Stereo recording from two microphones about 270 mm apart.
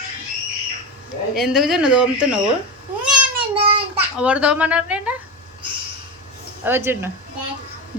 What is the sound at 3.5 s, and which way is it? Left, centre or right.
Child singing, centre.